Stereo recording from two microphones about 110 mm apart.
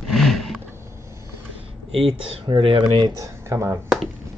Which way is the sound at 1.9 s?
55° right (ahead or behind).